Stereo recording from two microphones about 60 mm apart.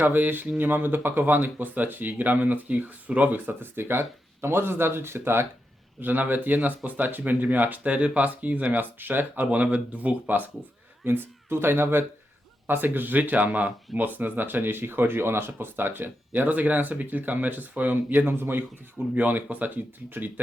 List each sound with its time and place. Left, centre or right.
0.0 s speech: right
11.0 s speech: right
18.9 s speech: right